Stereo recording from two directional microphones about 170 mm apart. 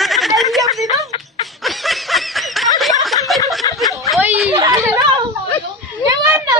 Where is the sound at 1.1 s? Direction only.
30° left (ahead or behind).